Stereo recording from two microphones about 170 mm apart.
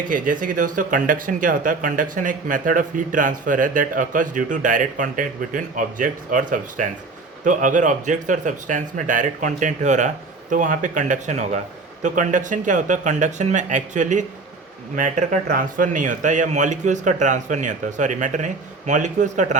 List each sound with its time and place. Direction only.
0.1 s speech: 50° right (ahead or behind)